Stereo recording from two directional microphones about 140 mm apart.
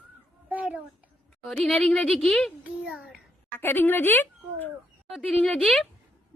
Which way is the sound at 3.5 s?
15° left (ahead or behind).